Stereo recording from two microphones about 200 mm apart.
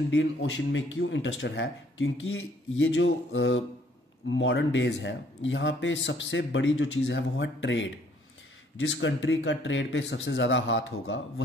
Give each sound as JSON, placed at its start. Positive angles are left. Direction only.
{"t": 0.1, "sound": "speech", "side_deg": 70}